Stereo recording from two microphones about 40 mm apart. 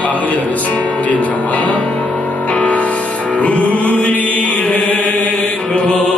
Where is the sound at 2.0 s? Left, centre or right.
Centre.